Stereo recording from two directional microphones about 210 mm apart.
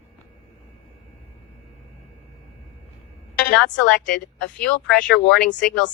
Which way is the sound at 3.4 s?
5° left (ahead or behind).